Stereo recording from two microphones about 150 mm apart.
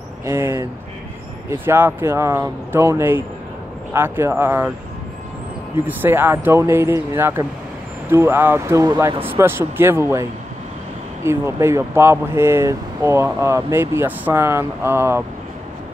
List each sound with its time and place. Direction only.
0.2 s speech: 15° right (ahead or behind)
5.9 s speech: 15° right (ahead or behind)
11.2 s speech: 15° right (ahead or behind)